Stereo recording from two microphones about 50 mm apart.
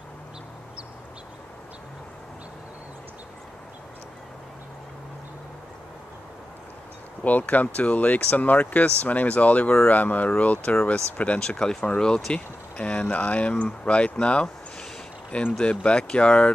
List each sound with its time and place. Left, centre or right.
7.2 s speech: left
11.3 s speech: centre
15.6 s speech: left